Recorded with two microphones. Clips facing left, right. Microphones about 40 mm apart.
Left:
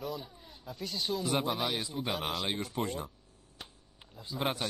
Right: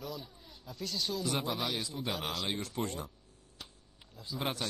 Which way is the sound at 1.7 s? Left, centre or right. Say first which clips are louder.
Left 2 dB; left.